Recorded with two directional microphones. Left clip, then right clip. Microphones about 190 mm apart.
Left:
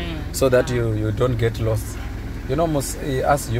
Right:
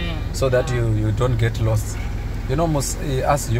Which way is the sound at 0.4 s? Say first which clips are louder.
Left 2 dB; 30° left (ahead or behind).